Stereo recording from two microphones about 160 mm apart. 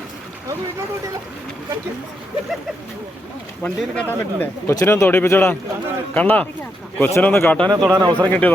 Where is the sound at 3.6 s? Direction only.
10° left (ahead or behind).